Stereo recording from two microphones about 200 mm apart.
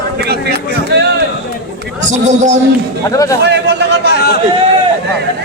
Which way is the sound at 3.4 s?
60° right (ahead or behind).